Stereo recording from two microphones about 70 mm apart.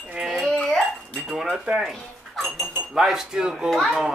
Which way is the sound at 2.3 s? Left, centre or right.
Centre.